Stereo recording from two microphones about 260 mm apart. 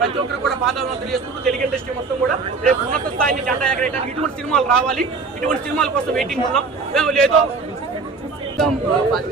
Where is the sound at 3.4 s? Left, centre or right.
Centre.